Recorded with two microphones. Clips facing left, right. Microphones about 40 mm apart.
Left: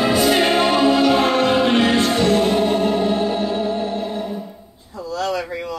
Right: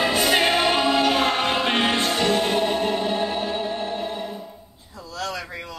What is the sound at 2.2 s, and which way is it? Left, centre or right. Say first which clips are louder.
Music: left 4 dB; right.